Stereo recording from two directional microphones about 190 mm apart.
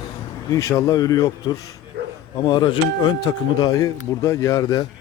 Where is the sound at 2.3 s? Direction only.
25° left (ahead or behind).